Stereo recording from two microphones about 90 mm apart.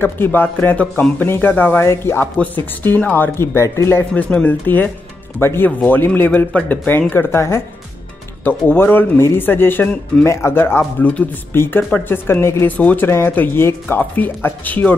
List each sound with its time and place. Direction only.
0.0 s speech: 25° left (ahead or behind)
4.1 s speech: 15° left (ahead or behind)
12.6 s speech: 20° left (ahead or behind)